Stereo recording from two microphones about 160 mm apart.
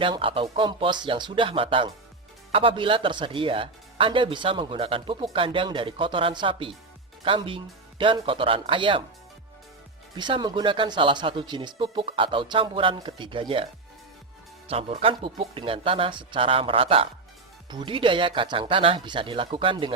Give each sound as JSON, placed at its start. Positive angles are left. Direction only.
{"t": 0.0, "sound": "speech", "side_deg": -35}
{"t": 10.2, "sound": "speech", "side_deg": -30}
{"t": 14.7, "sound": "speech", "side_deg": -40}